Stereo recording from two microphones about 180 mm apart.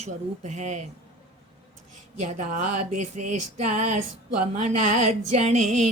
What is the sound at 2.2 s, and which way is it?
A woman's voice, 40° right (ahead or behind).